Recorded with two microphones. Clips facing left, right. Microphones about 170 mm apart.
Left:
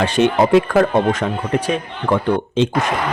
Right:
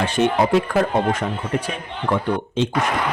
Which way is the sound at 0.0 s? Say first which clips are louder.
Left 3 dB; 85° left.